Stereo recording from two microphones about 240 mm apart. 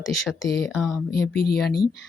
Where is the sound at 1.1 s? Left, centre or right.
Left.